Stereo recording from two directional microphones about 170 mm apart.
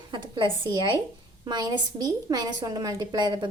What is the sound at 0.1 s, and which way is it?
A woman's voice, 30° right (ahead or behind).